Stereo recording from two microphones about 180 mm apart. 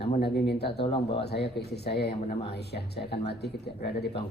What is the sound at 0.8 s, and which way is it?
Speech, 30° left (ahead or behind).